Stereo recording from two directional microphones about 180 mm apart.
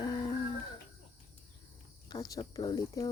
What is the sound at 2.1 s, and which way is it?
Speech, 20° left (ahead or behind).